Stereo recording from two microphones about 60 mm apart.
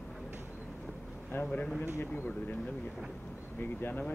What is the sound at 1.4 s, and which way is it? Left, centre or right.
Speech, left.